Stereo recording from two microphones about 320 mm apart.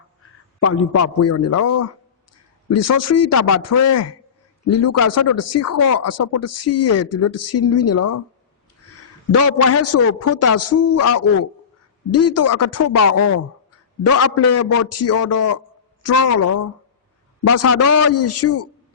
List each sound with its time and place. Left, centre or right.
0.6 s speech: left
9.3 s speech: left